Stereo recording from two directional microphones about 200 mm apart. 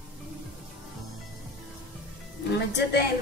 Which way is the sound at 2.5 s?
55° left (ahead or behind).